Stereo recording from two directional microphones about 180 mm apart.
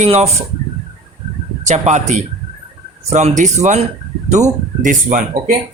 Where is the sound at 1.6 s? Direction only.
40° right (ahead or behind).